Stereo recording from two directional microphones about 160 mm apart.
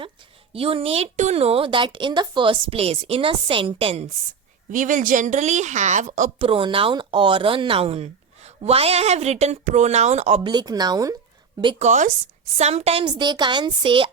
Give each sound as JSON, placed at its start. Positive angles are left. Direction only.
{"t": 0.5, "sound": "a woman's voice", "side_deg": -35}
{"t": 4.7, "sound": "speech", "side_deg": -55}
{"t": 6.4, "sound": "a woman's voice", "side_deg": -35}
{"t": 10.4, "sound": "speech", "side_deg": -25}
{"t": 11.8, "sound": "a woman's voice", "side_deg": -50}